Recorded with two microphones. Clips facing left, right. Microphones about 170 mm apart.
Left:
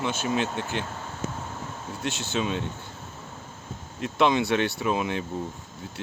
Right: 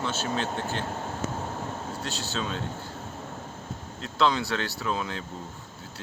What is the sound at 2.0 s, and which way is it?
Speech, 15° left (ahead or behind).